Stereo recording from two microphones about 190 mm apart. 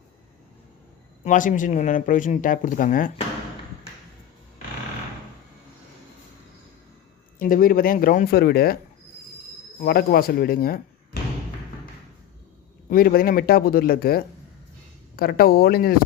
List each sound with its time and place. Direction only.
1.2 s speech: 40° left (ahead or behind)
7.3 s speech: 50° left (ahead or behind)
9.8 s speech: 55° left (ahead or behind)
12.9 s speech: 50° left (ahead or behind)